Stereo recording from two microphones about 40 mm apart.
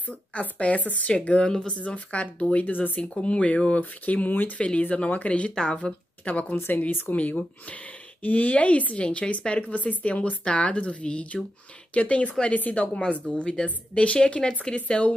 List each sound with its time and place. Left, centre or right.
0.3 s a woman's voice: left
2.7 s speech: left
3.0 s a woman's voice: left
4.3 s speech: left
4.6 s a woman's voice: left
5.5 s speech: centre
5.8 s speech: left
6.8 s a woman's voice: left
13.2 s speech: centre
13.7 s a woman's voice: left